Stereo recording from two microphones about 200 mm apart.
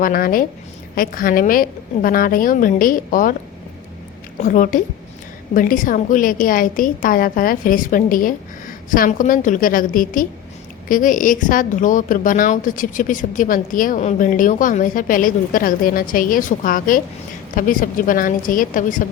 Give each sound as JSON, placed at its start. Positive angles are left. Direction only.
{"t": 0.0, "sound": "a woman's voice", "side_deg": 45}
{"t": 4.4, "sound": "a woman's voice", "side_deg": 40}